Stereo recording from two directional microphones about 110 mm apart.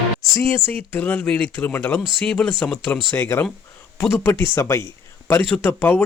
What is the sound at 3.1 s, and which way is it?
A man's voice, 20° left (ahead or behind).